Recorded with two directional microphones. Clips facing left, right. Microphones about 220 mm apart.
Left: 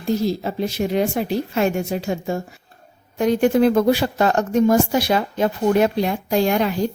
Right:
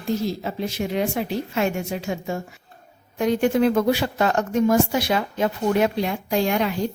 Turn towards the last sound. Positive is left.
turn(degrees=40)  # may be behind; listen again after turning